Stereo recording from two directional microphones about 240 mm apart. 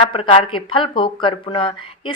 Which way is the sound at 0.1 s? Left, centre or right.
Left.